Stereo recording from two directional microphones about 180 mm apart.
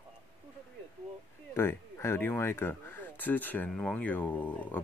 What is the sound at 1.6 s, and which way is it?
Speech, 15° left (ahead or behind).